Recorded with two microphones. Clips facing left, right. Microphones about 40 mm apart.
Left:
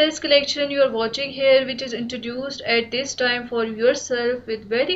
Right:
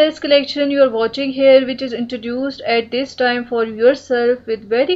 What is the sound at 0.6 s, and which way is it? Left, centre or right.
Speech, centre.